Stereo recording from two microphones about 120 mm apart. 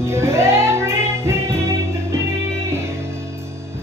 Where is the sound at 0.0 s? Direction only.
20° right (ahead or behind).